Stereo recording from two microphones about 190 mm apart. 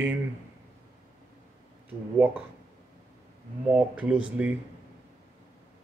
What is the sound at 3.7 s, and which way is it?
Speech, 5° right (ahead or behind).